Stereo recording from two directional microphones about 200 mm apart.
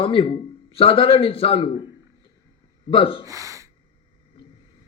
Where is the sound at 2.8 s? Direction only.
25° left (ahead or behind).